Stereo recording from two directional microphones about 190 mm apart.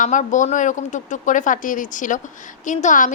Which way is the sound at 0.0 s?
40° left (ahead or behind).